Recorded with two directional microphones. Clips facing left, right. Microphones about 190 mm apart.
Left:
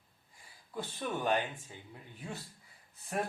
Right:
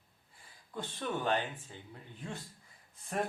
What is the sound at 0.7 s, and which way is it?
Speech, 10° left (ahead or behind).